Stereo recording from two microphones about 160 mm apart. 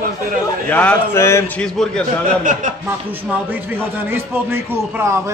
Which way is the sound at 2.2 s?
55° right (ahead or behind).